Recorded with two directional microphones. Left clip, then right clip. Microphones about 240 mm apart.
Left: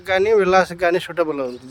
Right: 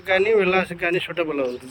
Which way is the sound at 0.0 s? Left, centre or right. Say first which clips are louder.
Left 2 dB; centre.